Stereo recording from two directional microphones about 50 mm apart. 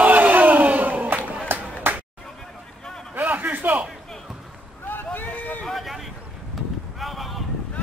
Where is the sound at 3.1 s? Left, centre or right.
Right.